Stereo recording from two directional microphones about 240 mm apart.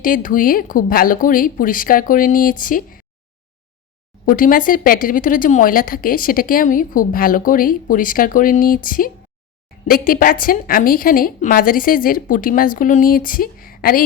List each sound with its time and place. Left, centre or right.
0.0 s a woman's voice: left
4.3 s a woman's voice: left